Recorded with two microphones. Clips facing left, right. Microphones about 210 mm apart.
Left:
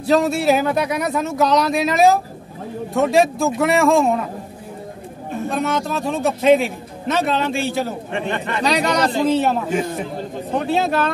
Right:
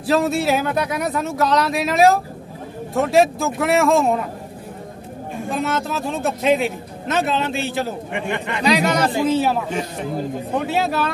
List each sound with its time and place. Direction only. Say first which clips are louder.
0.0 s a man's voice: left 2 dB; centre (ahead or behind)
5.5 s a man's voice: left 1 dB; centre (ahead or behind)
8.1 s a man's voice: left 1 dB; 15° right (ahead or behind)
10.7 s a man's voice: left 4 dB; 5° right (ahead or behind)